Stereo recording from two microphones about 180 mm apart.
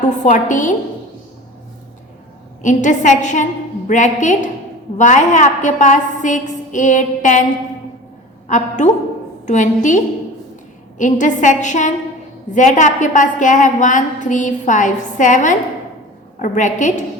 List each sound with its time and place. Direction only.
0.0 s a woman's voice: 45° left (ahead or behind)
2.6 s a woman's voice: 45° left (ahead or behind)
8.4 s a woman's voice: 40° left (ahead or behind)